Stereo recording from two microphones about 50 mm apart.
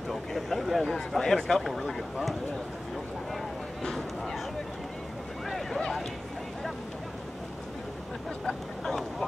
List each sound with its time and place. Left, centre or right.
0.1 s speech: centre
3.8 s speech: centre
5.5 s speech: centre
8.5 s speech: centre